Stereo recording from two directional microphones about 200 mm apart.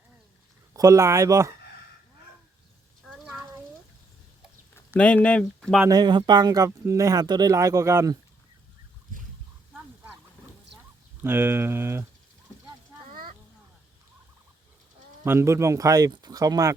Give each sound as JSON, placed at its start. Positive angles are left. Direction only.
{"t": 0.7, "sound": "speech", "side_deg": -15}
{"t": 3.1, "sound": "a sound", "side_deg": -5}
{"t": 4.7, "sound": "speech", "side_deg": 10}
{"t": 5.8, "sound": "speech", "side_deg": -20}
{"t": 11.2, "sound": "speech", "side_deg": -10}
{"t": 15.2, "sound": "speech", "side_deg": -10}